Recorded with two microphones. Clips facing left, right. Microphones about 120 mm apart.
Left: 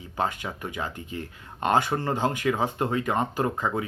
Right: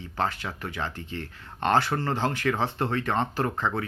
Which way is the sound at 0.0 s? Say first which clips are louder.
Even; 15° left (ahead or behind).